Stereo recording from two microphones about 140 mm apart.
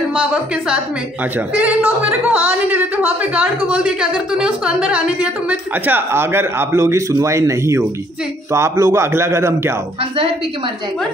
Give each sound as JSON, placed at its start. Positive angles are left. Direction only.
{"t": 0.1, "sound": "a woman's voice", "side_deg": -10}